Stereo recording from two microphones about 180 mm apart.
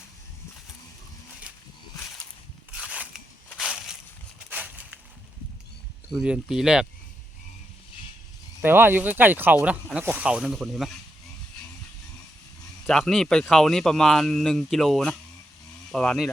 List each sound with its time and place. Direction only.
2.7 s crackle: 5° right (ahead or behind)
4.4 s a sound: 10° right (ahead or behind)
6.1 s speech: centre (ahead or behind)
8.6 s speech: 10° right (ahead or behind)
12.9 s speech: 5° left (ahead or behind)